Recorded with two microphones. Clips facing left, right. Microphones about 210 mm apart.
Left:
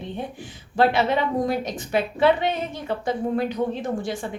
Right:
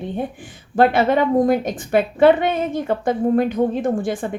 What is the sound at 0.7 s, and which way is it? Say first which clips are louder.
A woman's voice: right 5 dB; 50° right (ahead or behind).